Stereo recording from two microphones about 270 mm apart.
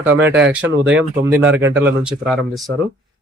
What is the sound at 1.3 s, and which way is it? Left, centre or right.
Speech, centre.